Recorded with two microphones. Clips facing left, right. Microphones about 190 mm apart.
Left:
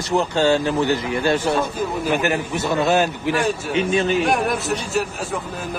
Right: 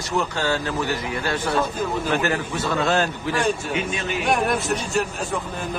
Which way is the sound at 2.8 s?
10° left (ahead or behind).